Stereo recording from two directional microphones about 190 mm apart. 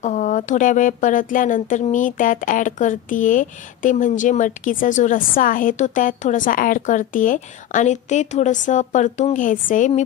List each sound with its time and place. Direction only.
0.0 s speech: 40° left (ahead or behind)